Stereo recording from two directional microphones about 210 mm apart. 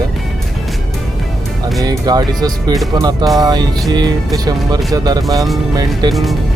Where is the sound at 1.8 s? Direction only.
20° right (ahead or behind).